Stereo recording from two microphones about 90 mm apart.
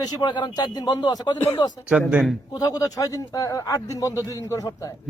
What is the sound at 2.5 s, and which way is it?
A man's voice, 45° left (ahead or behind).